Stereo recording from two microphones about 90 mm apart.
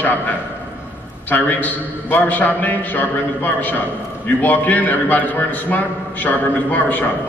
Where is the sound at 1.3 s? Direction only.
20° left (ahead or behind).